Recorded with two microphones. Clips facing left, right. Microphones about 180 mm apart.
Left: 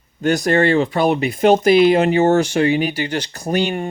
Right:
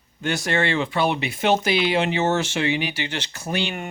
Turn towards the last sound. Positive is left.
turn(degrees=40)  # may be behind; listen again after turning